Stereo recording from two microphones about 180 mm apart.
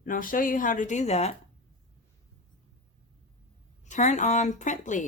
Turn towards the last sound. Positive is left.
turn(degrees=45)  # may be behind; listen again after turning